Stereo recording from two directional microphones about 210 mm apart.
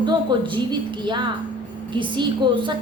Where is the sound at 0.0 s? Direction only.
20° right (ahead or behind).